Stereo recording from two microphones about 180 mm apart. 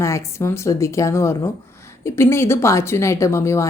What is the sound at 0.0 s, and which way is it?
A woman's voice, 15° left (ahead or behind).